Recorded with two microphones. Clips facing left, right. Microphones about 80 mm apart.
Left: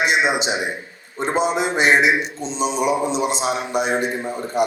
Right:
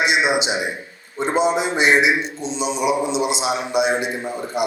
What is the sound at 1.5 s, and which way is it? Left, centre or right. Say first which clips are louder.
A man's voice: even; left.